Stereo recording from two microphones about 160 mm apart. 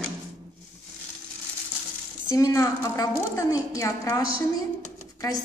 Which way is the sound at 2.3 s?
20° left (ahead or behind).